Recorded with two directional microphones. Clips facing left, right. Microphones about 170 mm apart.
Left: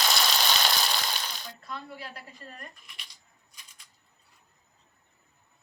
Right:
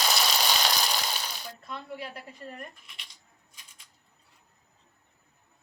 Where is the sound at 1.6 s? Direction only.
20° right (ahead or behind).